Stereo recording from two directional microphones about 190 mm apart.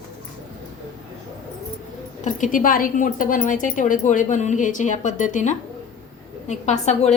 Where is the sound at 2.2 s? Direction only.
45° left (ahead or behind).